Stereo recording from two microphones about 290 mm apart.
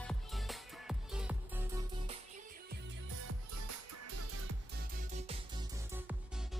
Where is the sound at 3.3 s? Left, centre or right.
Right.